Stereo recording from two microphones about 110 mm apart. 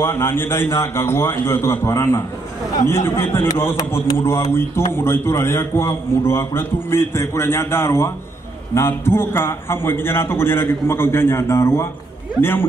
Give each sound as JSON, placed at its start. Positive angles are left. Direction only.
{"t": 0.0, "sound": "a man's voice", "side_deg": 20}